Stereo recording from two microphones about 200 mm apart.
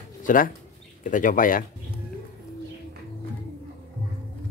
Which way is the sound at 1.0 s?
40° left (ahead or behind).